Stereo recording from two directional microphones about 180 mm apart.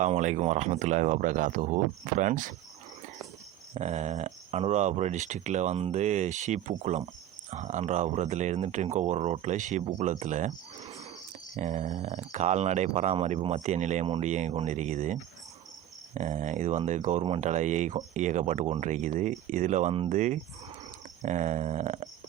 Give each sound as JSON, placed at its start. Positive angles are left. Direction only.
{"t": 0.0, "sound": "speech", "side_deg": -40}
{"t": 3.8, "sound": "speech", "side_deg": -40}
{"t": 10.8, "sound": "a sound", "side_deg": -20}
{"t": 11.5, "sound": "speech", "side_deg": -40}